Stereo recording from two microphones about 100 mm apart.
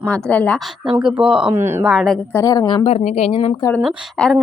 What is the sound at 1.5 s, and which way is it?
Speech, 25° right (ahead or behind).